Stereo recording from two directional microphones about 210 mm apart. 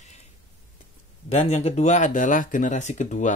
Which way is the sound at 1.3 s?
30° left (ahead or behind).